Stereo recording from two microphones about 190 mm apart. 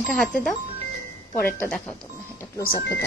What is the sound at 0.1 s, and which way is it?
Speech, 5° left (ahead or behind).